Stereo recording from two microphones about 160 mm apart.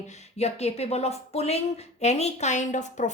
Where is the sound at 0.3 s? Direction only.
40° left (ahead or behind).